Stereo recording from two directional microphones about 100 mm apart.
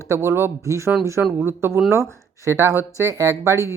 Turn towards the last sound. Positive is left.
turn(degrees=-30)  # may be behind; listen again after turning